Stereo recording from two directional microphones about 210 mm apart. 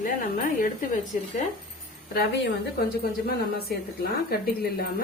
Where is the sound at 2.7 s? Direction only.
45° left (ahead or behind).